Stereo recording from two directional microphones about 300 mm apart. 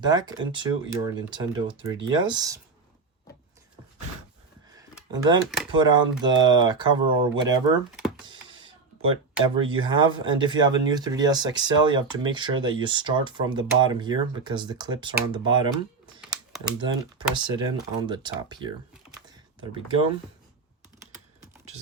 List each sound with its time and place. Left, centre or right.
0.0 s speech: centre
4.8 s a sound: centre
5.7 s speech: centre
7.9 s typing: centre
8.2 s a sound: centre
9.4 s speech: centre
16.8 s speech: centre